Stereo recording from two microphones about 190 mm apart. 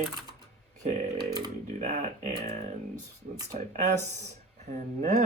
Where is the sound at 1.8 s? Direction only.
40° right (ahead or behind).